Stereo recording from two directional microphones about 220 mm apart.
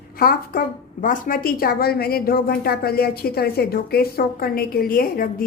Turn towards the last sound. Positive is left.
turn(degrees=40)  # may be behind; listen again after turning